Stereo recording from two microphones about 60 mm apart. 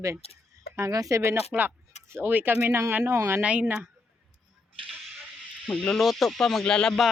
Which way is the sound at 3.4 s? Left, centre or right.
Right.